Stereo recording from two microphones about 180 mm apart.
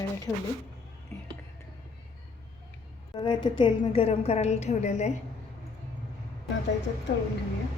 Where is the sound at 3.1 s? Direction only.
25° left (ahead or behind).